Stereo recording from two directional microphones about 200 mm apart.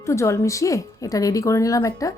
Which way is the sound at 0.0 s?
15° left (ahead or behind).